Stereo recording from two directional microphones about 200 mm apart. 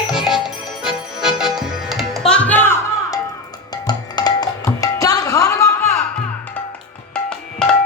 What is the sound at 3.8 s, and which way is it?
Tabla, 20° left (ahead or behind).